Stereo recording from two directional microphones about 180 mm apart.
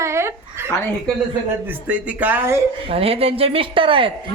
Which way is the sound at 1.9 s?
10° right (ahead or behind).